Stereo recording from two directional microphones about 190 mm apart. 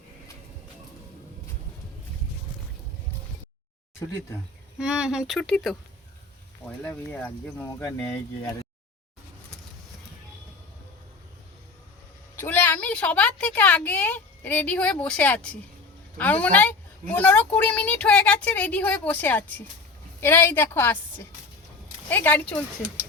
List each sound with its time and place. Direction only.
4.8 s a woman's voice: 5° right (ahead or behind)
12.4 s a woman's voice: 10° left (ahead or behind)